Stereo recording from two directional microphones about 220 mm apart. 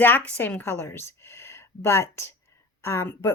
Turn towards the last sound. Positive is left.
turn(degrees=10)  # may be behind; listen again after turning